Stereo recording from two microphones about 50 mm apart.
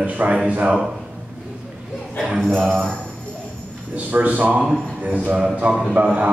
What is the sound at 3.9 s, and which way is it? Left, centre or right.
A man's voice, right.